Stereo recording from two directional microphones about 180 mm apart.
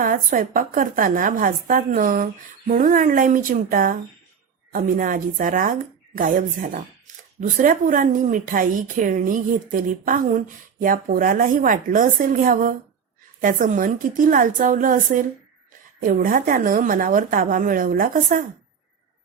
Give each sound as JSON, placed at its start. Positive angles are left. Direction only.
{"t": 0.0, "sound": "a woman's voice", "side_deg": -50}